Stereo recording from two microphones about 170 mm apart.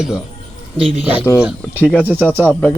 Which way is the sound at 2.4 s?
5° left (ahead or behind).